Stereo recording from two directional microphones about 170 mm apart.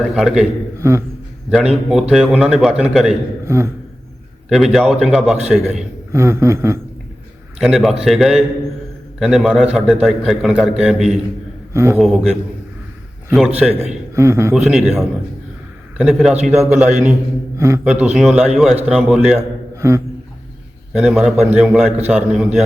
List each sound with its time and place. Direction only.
0.0 s a man's voice: centre (ahead or behind)
0.8 s a sound: 15° right (ahead or behind)
1.5 s a man's voice: 5° right (ahead or behind)
3.4 s a man's voice: 15° right (ahead or behind)
4.4 s a man's voice: centre (ahead or behind)
6.1 s a man's voice: 15° right (ahead or behind)
7.6 s a man's voice: centre (ahead or behind)
11.7 s a man's voice: 15° right (ahead or behind)
11.9 s a man's voice: centre (ahead or behind)
13.6 s a man's voice: 10° right (ahead or behind)
14.5 s a man's voice: 5° right (ahead or behind)
19.4 s a sound: 15° right (ahead or behind)
20.9 s a man's voice: 5° right (ahead or behind)